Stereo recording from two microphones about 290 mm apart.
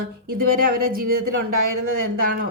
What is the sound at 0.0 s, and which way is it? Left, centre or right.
Speech, right.